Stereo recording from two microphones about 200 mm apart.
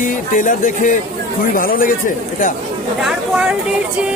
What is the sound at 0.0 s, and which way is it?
A man's voice, 40° left (ahead or behind).